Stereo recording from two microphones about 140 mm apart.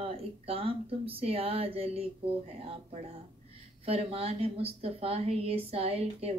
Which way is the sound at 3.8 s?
45° right (ahead or behind).